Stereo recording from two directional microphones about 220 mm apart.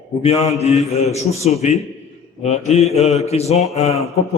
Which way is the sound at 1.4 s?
30° left (ahead or behind).